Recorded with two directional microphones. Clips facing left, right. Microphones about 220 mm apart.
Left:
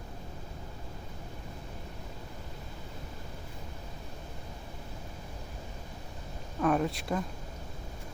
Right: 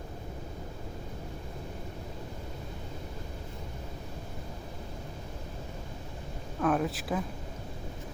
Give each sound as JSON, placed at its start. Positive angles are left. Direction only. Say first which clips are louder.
{"t": 6.6, "sound": "speech", "louder": "even", "side_deg": 0}